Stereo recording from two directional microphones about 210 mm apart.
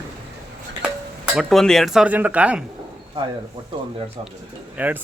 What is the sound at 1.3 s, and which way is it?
Speech, centre (ahead or behind).